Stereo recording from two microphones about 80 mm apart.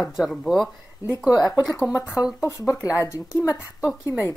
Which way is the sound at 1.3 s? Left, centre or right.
Left.